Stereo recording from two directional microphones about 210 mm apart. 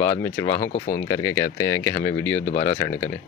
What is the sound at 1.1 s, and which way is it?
Speech, 15° left (ahead or behind).